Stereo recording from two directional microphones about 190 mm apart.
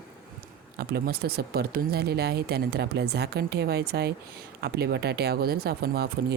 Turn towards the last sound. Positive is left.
turn(degrees=-55)  # may be behind; listen again after turning